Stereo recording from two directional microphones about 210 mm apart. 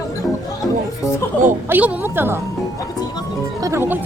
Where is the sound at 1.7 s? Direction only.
10° right (ahead or behind).